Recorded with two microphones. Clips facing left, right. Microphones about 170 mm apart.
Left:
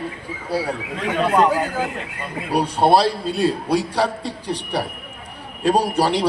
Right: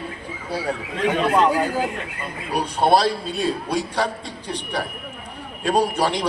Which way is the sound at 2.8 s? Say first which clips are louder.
Left 1 dB; 35° left (ahead or behind).